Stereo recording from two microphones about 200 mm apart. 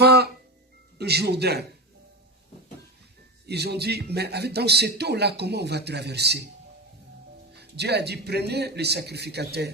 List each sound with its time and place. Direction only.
0.0 s music: 55° right (ahead or behind)
0.9 s a man's voice: 55° right (ahead or behind)
3.4 s a man's voice: 55° right (ahead or behind)
7.5 s a man's voice: 55° right (ahead or behind)